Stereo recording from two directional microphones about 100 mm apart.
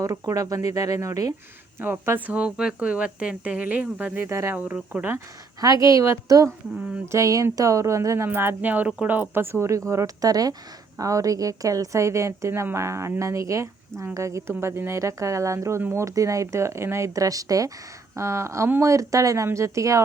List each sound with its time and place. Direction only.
0.0 s a woman's voice: 35° right (ahead or behind)
1.8 s speech: 20° right (ahead or behind)
4.3 s speech: 30° right (ahead or behind)
4.5 s speech: 15° right (ahead or behind)
5.5 s a woman's voice: 40° right (ahead or behind)